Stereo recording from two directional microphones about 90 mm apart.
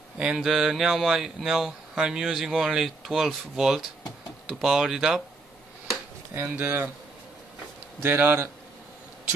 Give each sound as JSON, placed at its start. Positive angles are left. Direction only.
{"t": 0.2, "sound": "speech", "side_deg": -5}
{"t": 6.3, "sound": "speech", "side_deg": -25}
{"t": 8.0, "sound": "speech", "side_deg": -25}